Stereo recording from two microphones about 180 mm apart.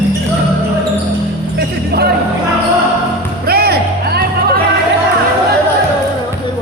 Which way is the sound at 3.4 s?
60° right (ahead or behind).